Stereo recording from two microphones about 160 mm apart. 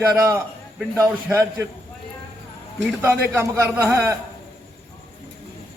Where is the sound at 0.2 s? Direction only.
15° right (ahead or behind).